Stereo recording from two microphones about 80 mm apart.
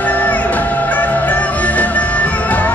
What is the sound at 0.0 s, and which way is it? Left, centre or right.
Music, centre.